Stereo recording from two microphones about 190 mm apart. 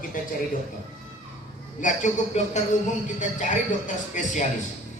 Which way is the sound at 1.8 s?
40° left (ahead or behind).